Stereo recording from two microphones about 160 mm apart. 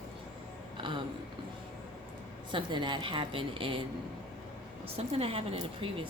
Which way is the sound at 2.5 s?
30° right (ahead or behind).